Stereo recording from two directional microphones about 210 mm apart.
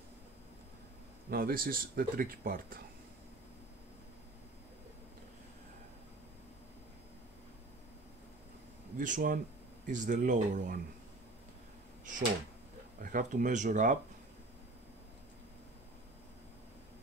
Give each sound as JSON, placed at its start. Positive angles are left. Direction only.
{"t": 1.3, "sound": "speech", "side_deg": -45}
{"t": 8.9, "sound": "speech", "side_deg": -40}
{"t": 13.0, "sound": "speech", "side_deg": -40}